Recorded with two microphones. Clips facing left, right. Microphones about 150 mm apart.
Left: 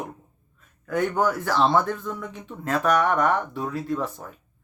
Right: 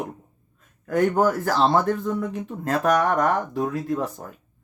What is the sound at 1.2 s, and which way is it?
Speech, 40° right (ahead or behind).